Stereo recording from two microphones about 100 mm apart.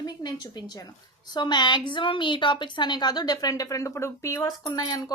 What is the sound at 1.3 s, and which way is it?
A woman's voice, 45° left (ahead or behind).